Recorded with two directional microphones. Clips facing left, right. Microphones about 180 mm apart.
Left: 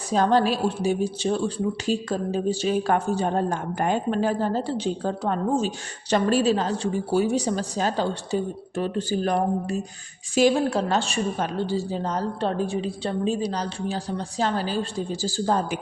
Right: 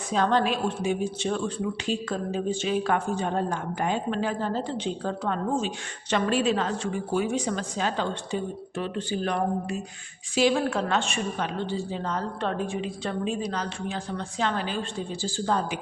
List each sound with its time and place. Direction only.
0.1 s speech: 40° left (ahead or behind)